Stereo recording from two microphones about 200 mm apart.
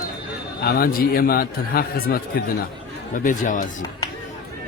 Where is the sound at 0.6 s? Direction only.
50° left (ahead or behind).